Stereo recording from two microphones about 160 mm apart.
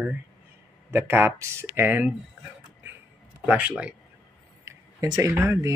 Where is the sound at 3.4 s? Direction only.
10° right (ahead or behind).